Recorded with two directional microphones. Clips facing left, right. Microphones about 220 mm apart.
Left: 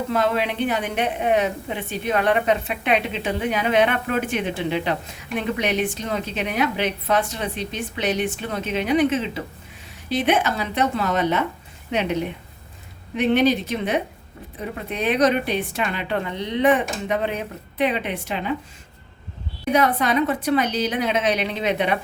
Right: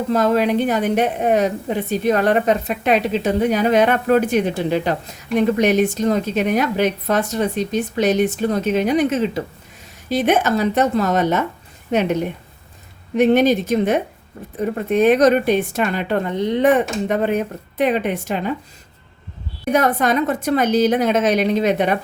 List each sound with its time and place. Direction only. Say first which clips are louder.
0.1 s a woman's voice: right 7 dB; 40° right (ahead or behind)
19.7 s a woman's voice: right 3 dB; 45° right (ahead or behind)